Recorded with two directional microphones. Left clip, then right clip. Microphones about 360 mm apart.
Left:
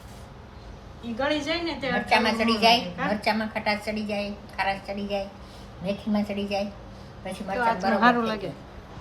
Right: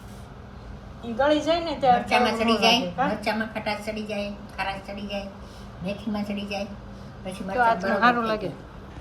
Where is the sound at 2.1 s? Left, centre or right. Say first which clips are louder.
Right 1 dB; left.